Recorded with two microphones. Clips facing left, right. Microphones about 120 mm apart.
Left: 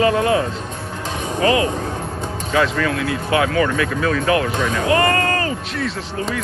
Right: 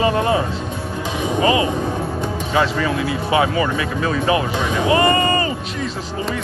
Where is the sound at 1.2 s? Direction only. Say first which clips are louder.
Even; 10° right (ahead or behind).